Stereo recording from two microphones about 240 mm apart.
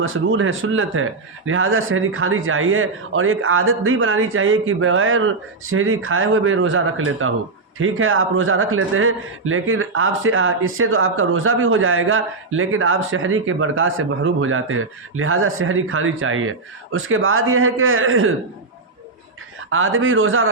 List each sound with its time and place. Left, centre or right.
0.0 s a man's voice: right
19.7 s a man's voice: right